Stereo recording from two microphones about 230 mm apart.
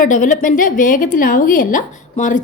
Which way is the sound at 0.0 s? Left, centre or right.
Left.